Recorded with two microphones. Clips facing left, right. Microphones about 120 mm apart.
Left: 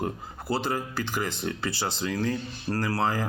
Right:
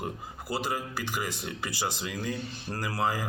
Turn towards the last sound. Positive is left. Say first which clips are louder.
# left 3 dB
turn(degrees=-15)  # may be behind; listen again after turning